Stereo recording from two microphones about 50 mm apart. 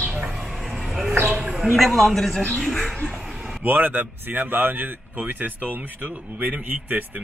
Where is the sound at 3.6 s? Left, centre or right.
Right.